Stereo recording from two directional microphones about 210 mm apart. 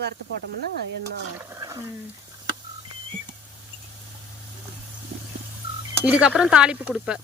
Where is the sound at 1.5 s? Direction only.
15° right (ahead or behind).